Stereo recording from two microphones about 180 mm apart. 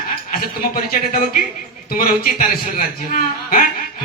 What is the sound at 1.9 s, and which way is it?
A man's voice, 55° left (ahead or behind).